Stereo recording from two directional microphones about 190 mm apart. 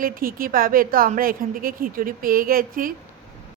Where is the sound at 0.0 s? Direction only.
50° right (ahead or behind).